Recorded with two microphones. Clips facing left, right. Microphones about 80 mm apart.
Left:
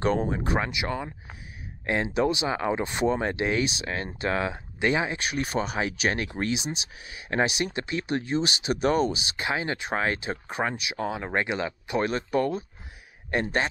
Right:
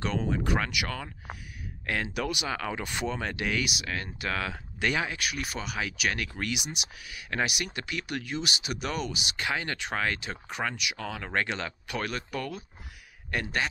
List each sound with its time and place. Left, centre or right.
0.3 s speech: left